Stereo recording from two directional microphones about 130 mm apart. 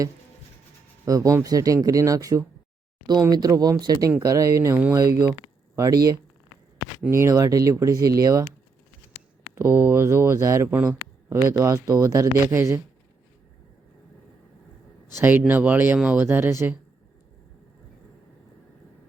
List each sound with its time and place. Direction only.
1.0 s speech: 25° right (ahead or behind)
9.6 s speech: 20° right (ahead or behind)
15.2 s speech: 15° right (ahead or behind)